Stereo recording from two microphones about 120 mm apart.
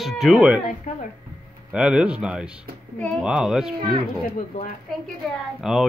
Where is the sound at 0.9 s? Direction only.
80° left.